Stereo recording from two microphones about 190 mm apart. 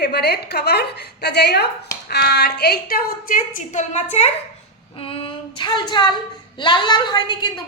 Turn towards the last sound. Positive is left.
turn(degrees=20)  # may be behind; listen again after turning